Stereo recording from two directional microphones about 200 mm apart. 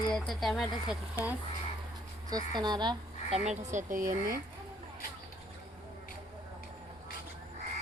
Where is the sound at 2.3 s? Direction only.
20° right (ahead or behind).